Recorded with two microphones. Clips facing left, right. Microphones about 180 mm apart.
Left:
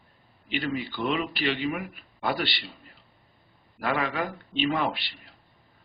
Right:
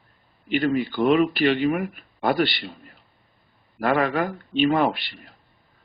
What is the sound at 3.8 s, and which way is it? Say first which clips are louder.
A man's voice: right 6 dB; 50° right (ahead or behind).